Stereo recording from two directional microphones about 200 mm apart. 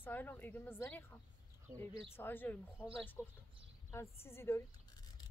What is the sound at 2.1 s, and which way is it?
A woman's voice, 10° left (ahead or behind).